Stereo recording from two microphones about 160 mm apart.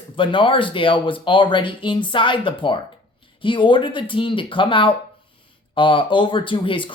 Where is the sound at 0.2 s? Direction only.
30° left (ahead or behind).